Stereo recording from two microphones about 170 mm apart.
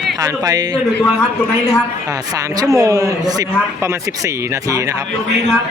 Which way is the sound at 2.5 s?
20° right (ahead or behind).